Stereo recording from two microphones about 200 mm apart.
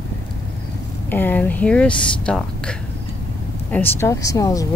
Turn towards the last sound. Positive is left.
turn(degrees=15)  # may be behind; listen again after turning